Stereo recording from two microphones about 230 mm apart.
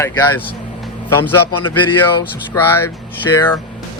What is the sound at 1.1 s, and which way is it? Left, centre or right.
Speech, left.